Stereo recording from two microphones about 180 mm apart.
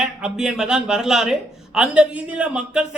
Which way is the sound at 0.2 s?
5° right (ahead or behind).